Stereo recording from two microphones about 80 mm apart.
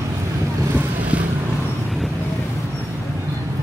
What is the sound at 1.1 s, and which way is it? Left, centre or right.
Vehicle, centre.